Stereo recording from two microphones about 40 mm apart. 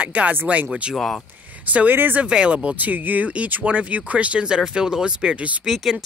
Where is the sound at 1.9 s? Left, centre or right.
Right.